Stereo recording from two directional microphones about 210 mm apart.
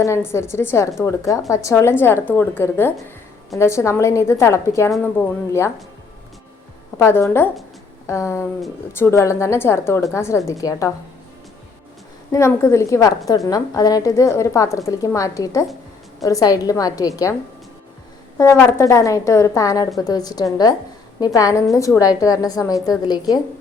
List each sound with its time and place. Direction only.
0.0 s a woman's voice: 10° left (ahead or behind)
6.9 s a woman's voice: 10° left (ahead or behind)
12.3 s a woman's voice: 10° left (ahead or behind)
18.3 s a woman's voice: 10° left (ahead or behind)